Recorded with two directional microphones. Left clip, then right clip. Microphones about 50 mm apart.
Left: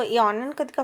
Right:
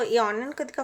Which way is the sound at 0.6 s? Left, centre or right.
Left.